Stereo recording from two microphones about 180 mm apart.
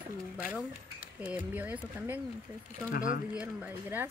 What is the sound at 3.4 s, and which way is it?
Speech, 10° right (ahead or behind).